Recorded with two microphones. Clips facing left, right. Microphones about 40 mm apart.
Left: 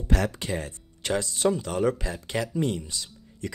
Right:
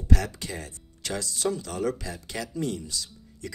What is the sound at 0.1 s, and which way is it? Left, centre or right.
Speech, left.